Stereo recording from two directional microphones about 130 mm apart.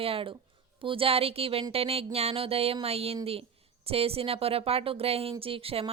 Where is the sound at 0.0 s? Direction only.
45° right (ahead or behind).